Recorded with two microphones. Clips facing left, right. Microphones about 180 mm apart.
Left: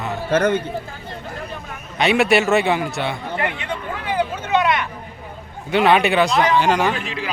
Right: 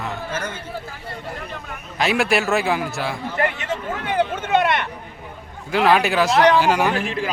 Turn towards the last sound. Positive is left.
turn(degrees=-50)  # may be behind; listen again after turning